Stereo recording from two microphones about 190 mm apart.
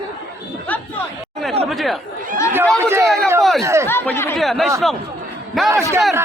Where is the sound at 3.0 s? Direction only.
Centre (ahead or behind).